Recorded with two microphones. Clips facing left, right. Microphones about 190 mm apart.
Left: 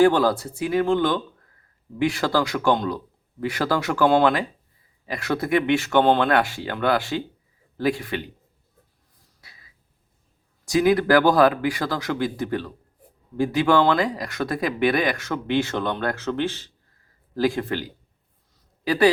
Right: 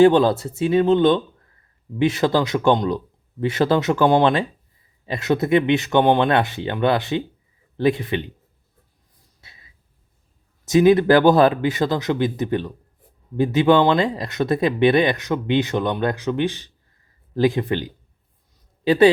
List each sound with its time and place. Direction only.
0.0 s speech: 25° right (ahead or behind)
9.4 s a sound: 25° right (ahead or behind)
10.7 s speech: 20° right (ahead or behind)